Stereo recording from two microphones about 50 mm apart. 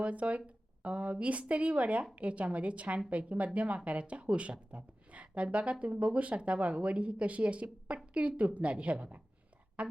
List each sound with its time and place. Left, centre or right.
0.0 s a woman's voice: right